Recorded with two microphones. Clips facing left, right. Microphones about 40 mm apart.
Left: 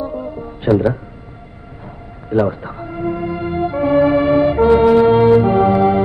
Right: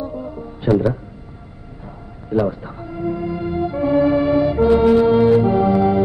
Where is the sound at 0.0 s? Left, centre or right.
Left.